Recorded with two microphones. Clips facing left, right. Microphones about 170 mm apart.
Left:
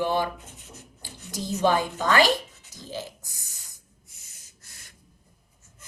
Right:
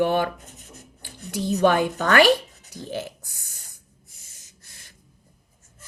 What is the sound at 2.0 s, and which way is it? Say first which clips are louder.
Speech: right 5 dB; 65° right (ahead or behind).